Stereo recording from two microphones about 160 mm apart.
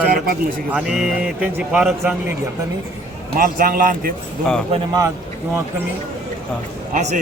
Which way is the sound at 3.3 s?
65° right (ahead or behind).